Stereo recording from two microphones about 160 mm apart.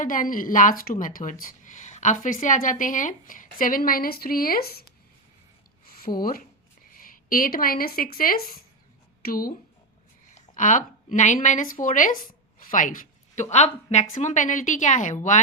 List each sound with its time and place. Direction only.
0.0 s a woman's voice: 55° left (ahead or behind); by 4.9 s 75° left (ahead or behind)
6.1 s a woman's voice: 60° left (ahead or behind)
10.2 s a woman's voice: 50° left (ahead or behind)